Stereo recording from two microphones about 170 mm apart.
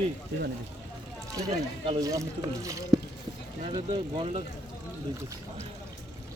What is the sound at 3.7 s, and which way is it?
Speech, 30° right (ahead or behind).